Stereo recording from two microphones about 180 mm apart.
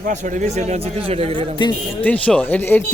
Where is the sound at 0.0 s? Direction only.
45° right (ahead or behind).